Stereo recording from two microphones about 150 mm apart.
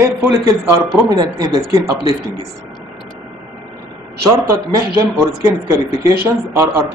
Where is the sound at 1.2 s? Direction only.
25° right (ahead or behind).